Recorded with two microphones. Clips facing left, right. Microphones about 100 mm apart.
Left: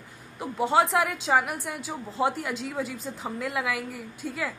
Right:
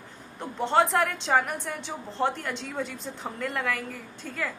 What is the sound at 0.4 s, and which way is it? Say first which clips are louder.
A woman's voice: left 1 dB; 5° left (ahead or behind).